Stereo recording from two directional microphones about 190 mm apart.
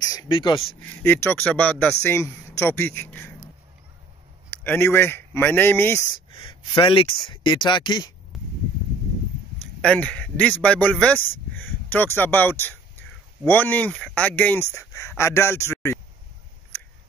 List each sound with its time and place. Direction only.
0.0 s speech: 20° left (ahead or behind)
1.0 s speech: 10° left (ahead or behind)
4.5 s speech: 10° left (ahead or behind)
6.1 s speech: 20° left (ahead or behind)
8.3 s arrow: centre (ahead or behind)
9.8 s speech: 5° left (ahead or behind)